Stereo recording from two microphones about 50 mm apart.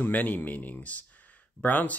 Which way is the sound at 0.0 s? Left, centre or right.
Left.